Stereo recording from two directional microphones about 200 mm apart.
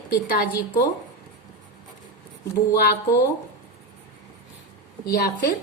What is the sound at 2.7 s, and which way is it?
Speech, 55° left (ahead or behind).